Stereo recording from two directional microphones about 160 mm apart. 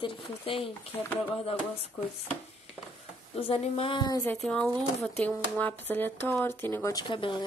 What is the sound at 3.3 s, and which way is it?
Speech, 35° left (ahead or behind).